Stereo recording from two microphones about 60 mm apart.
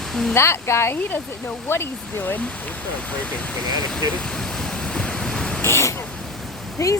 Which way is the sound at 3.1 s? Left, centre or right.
Left.